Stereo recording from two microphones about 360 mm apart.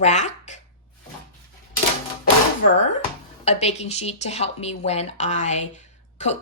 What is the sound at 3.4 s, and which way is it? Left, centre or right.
A woman's voice, centre.